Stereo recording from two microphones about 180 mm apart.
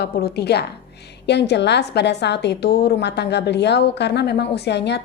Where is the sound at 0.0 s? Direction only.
65° left (ahead or behind).